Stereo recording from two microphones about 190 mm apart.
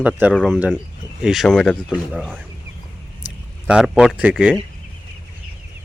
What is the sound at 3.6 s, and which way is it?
Speech, 5° right (ahead or behind).